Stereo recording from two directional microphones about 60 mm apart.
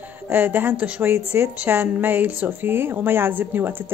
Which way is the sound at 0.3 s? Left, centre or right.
Right.